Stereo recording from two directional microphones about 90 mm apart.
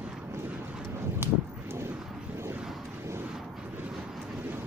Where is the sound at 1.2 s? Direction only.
25° right (ahead or behind).